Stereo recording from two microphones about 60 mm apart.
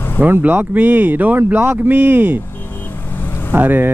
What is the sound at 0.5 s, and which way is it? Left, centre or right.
Speech, right.